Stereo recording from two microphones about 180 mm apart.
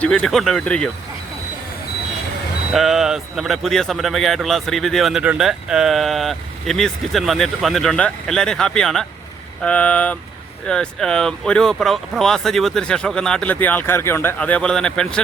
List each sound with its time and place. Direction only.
0.0 s a man's voice: 5° left (ahead or behind)
2.7 s a man's voice: centre (ahead or behind)